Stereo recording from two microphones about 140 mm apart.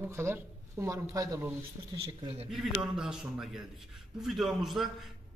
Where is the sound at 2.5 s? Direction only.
5° right (ahead or behind).